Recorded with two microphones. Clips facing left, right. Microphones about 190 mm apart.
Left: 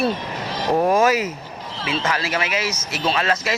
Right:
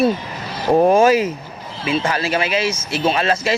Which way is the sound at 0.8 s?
30° right (ahead or behind).